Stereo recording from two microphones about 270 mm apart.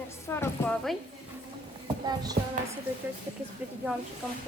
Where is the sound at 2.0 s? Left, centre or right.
Centre.